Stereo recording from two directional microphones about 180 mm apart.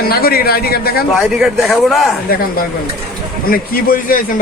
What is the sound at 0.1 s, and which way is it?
Speech, 60° left (ahead or behind).